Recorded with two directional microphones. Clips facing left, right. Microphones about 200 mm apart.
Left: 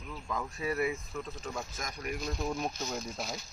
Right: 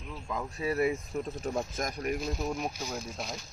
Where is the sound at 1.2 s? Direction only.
40° right (ahead or behind).